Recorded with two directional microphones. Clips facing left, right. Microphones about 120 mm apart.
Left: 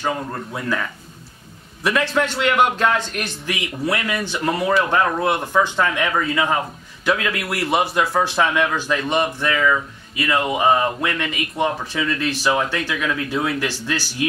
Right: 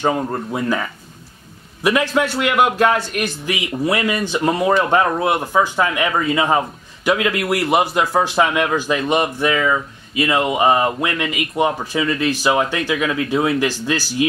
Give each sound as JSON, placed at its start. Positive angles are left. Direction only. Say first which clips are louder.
{"t": 0.0, "sound": "speech", "louder": "right 5 dB", "side_deg": -25}